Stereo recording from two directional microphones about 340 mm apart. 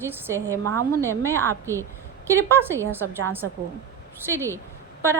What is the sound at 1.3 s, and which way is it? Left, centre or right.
Speech, centre.